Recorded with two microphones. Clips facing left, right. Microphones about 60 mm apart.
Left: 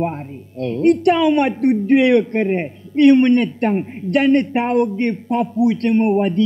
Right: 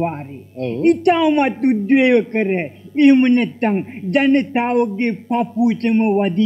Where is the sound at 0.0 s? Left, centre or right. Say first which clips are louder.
Even; centre.